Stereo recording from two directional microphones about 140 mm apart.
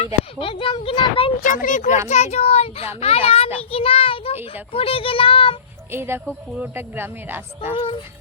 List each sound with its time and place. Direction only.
0.3 s a child's voice: 40° left (ahead or behind)
1.4 s speech: 65° left (ahead or behind)
2.0 s a child's voice: 50° left (ahead or behind)
5.9 s speech: 15° right (ahead or behind)